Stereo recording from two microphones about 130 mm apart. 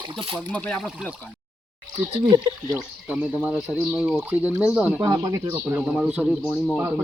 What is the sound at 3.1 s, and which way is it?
Speech, 10° right (ahead or behind).